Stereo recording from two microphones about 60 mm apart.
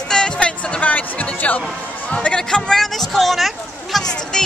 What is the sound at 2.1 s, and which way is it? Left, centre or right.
Speech, centre.